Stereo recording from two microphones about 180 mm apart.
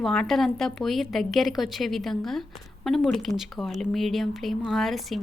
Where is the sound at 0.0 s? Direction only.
Centre (ahead or behind).